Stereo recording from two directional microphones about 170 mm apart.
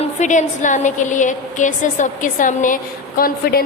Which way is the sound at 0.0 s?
45° left (ahead or behind).